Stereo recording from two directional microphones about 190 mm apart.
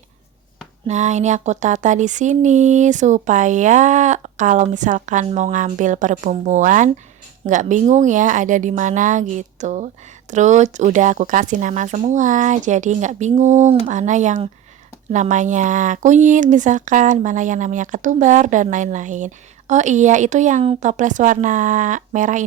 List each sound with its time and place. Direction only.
0.9 s speech: 40° right (ahead or behind)